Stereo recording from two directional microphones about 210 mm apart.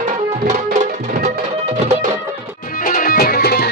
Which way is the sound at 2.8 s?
40° left (ahead or behind).